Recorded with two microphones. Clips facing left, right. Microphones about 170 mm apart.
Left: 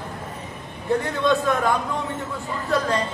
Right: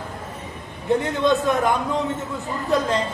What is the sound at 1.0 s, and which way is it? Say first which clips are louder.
Speech: right 1 dB; 20° right (ahead or behind).